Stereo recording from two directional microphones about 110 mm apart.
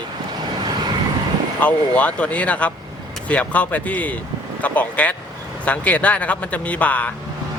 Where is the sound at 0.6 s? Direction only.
40° right (ahead or behind).